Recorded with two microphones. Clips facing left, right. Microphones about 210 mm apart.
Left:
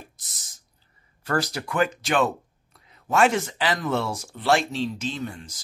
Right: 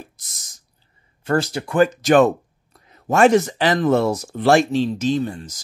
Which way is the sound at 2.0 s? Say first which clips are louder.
Right 9 dB; 45° right (ahead or behind).